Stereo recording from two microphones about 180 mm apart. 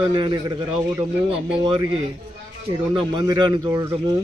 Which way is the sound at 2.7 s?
25° right (ahead or behind).